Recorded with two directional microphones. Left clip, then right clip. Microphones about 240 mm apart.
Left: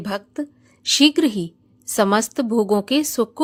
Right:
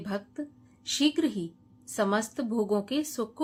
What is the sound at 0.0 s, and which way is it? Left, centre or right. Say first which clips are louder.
A woman's voice: left 9 dB; left.